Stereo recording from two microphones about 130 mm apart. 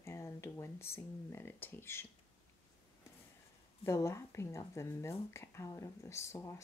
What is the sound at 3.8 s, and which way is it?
Speech, 20° left (ahead or behind).